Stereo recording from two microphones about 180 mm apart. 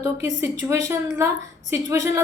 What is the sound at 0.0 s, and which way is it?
A woman's voice, 20° right (ahead or behind).